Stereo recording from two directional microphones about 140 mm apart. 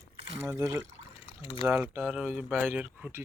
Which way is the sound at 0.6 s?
25° right (ahead or behind).